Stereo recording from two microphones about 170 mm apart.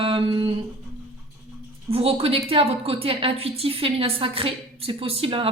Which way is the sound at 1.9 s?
35° right (ahead or behind).